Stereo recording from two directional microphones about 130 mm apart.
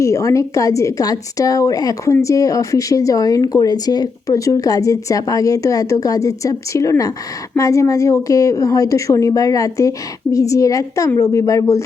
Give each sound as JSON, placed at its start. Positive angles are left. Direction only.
{"t": 0.0, "sound": "speech", "side_deg": 25}